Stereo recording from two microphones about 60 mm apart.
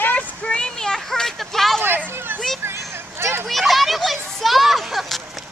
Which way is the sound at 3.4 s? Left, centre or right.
Centre.